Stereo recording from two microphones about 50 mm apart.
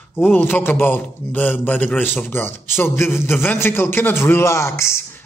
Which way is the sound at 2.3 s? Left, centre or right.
Left.